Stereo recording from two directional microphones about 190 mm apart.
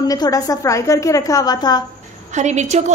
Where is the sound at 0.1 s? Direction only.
20° left (ahead or behind).